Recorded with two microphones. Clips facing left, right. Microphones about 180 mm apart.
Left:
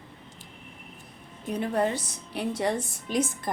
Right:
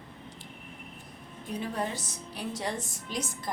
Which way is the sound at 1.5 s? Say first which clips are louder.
Left 7 dB; 65° left (ahead or behind).